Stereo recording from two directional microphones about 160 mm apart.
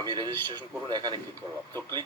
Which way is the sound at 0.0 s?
25° right (ahead or behind).